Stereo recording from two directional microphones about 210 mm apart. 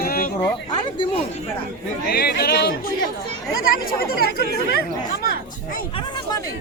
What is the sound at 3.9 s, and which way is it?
Speech, 45° left (ahead or behind).